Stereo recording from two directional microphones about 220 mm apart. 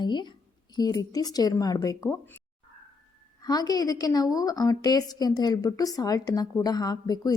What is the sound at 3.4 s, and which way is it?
A woman's voice, 15° left (ahead or behind).